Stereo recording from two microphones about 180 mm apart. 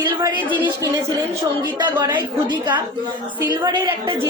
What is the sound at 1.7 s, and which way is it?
A woman's voice, 25° right (ahead or behind).